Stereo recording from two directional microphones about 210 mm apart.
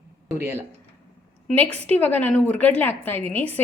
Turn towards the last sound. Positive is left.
turn(degrees=10)  # may be behind; listen again after turning